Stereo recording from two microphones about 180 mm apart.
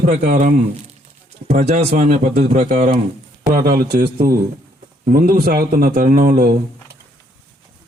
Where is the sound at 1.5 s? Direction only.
40° right (ahead or behind).